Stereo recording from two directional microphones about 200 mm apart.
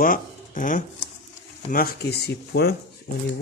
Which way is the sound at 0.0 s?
40° left (ahead or behind).